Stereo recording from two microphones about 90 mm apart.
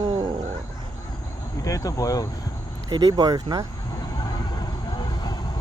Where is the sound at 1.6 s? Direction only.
40° left (ahead or behind).